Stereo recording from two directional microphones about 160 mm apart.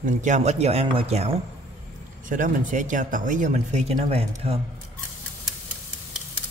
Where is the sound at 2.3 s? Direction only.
55° right (ahead or behind); by 4.5 s 40° right (ahead or behind).